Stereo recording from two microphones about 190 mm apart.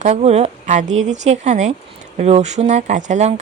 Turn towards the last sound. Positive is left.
turn(degrees=-35)  # may be behind; listen again after turning